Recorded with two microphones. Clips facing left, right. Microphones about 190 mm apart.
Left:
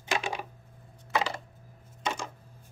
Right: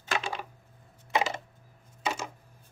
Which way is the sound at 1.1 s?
20° right (ahead or behind).